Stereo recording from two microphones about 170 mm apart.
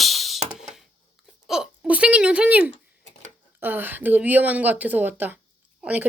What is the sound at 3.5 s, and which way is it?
Speech, 10° right (ahead or behind).